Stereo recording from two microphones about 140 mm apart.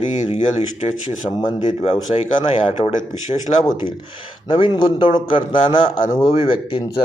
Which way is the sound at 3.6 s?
30° left (ahead or behind).